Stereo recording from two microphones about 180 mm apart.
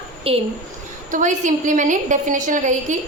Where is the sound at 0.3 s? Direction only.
30° right (ahead or behind).